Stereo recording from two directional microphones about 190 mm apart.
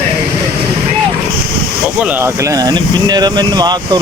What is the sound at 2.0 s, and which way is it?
Speech, 15° right (ahead or behind).